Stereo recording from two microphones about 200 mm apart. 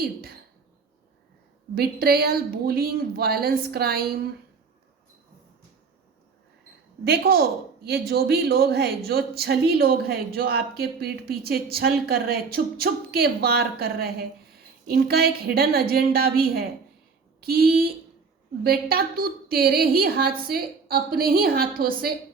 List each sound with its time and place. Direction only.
0.0 s a woman's voice: 50° right (ahead or behind)
1.7 s speech: 50° right (ahead or behind)
7.0 s speech: 50° right (ahead or behind)